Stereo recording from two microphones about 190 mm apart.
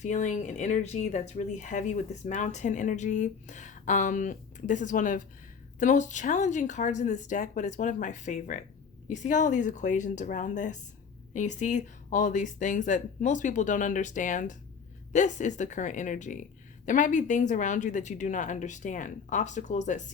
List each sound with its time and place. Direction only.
0.0 s speech: 40° left (ahead or behind)